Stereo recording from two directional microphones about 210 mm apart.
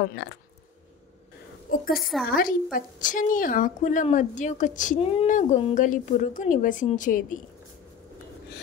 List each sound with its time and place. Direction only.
0.0 s speech: 55° left (ahead or behind)
2.0 s a woman's voice: centre (ahead or behind)
2.3 s a woman's voice: 40° left (ahead or behind)